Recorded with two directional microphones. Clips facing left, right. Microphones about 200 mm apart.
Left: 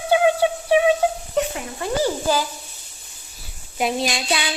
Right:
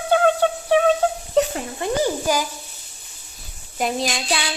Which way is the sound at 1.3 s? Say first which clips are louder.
Right 3 dB; 30° right (ahead or behind).